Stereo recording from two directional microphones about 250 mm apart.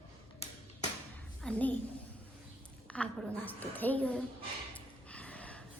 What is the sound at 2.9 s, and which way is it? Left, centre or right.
A woman's voice, centre.